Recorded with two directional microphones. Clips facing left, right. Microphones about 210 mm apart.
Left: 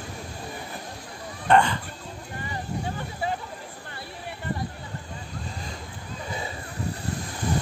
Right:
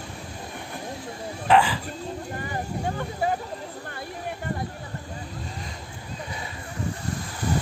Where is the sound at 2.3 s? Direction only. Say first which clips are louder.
Left 2 dB; 45° right (ahead or behind).